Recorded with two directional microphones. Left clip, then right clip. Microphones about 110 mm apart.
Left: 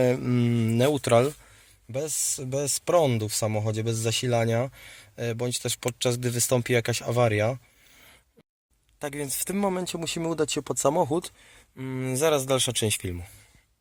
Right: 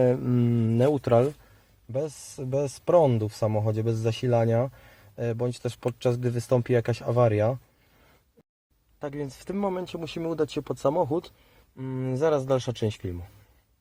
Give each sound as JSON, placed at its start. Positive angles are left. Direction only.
{"t": 0.0, "sound": "speech", "side_deg": 5}
{"t": 1.9, "sound": "speech", "side_deg": -5}
{"t": 2.9, "sound": "speech", "side_deg": 10}
{"t": 3.2, "sound": "speech", "side_deg": -10}
{"t": 9.0, "sound": "speech", "side_deg": 15}
{"t": 9.6, "sound": "speech", "side_deg": 35}
{"t": 12.1, "sound": "speech", "side_deg": 15}
{"t": 13.0, "sound": "speech", "side_deg": 25}